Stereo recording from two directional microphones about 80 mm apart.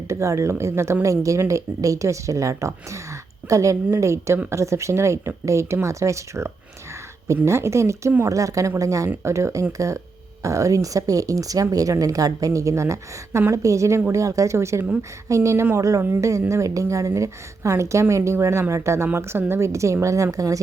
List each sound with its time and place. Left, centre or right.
0.1 s speech: right